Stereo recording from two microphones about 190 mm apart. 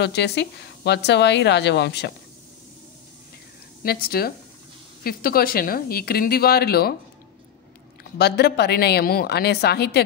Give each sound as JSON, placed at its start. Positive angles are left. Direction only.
{"t": 0.0, "sound": "speech", "side_deg": 60}
{"t": 3.8, "sound": "speech", "side_deg": 55}
{"t": 8.2, "sound": "speech", "side_deg": 60}